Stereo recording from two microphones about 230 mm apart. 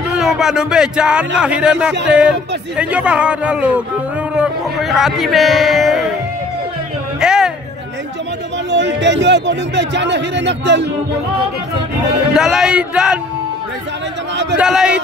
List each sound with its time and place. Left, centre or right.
0.1 s a man's voice: centre
7.2 s a sound: centre
8.6 s speech: right
12.4 s a man's voice: centre
14.3 s speech: right
14.6 s a man's voice: centre